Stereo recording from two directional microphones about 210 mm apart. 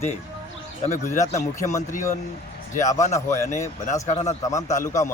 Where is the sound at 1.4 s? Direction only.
15° left (ahead or behind).